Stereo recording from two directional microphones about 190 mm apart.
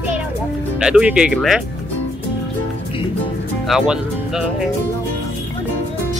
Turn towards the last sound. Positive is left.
turn(degrees=-5)  # may be behind; listen again after turning